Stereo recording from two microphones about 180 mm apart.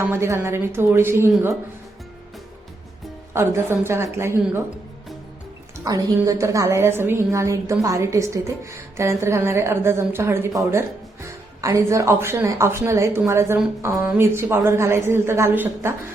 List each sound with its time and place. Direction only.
0.0 s a woman's voice: 15° right (ahead or behind)
3.3 s a woman's voice: 15° right (ahead or behind)
5.7 s a woman's voice: 15° right (ahead or behind)